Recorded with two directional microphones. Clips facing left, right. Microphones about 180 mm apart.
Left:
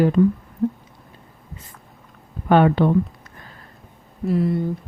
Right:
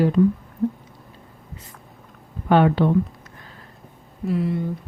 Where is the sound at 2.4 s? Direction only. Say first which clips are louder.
Left 1 dB; 50° left (ahead or behind).